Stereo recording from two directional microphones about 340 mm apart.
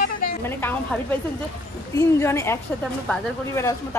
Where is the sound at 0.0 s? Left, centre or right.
Left.